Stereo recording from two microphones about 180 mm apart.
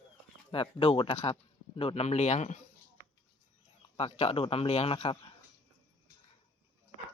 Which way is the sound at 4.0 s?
35° left (ahead or behind).